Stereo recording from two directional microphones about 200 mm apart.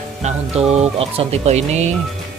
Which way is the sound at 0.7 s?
30° right (ahead or behind).